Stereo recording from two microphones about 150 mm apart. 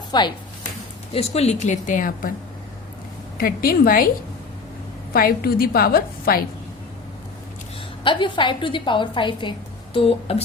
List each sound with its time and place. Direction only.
0.1 s speech: 30° left (ahead or behind)
1.1 s a woman's voice: 45° left (ahead or behind); by 2.3 s 65° left (ahead or behind)
3.3 s a woman's voice: 75° left (ahead or behind)
5.1 s a woman's voice: 80° left
8.0 s a woman's voice: 35° left (ahead or behind)